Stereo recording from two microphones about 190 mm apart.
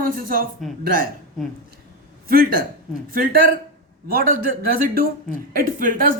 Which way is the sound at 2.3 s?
50° right (ahead or behind).